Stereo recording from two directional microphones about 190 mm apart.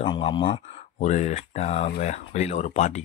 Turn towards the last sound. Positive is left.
turn(degrees=40)  # may be behind; listen again after turning